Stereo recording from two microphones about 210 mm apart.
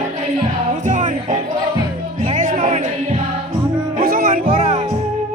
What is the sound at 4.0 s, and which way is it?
Music, 45° right (ahead or behind).